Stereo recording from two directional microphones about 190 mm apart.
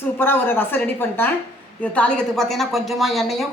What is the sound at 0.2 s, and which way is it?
A woman's voice, 10° left (ahead or behind).